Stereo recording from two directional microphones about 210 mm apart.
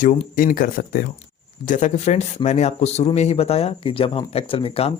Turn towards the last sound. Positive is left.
turn(degrees=25)  # may be behind; listen again after turning